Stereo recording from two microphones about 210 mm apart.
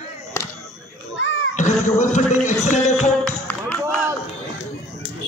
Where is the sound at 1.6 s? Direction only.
35° left (ahead or behind).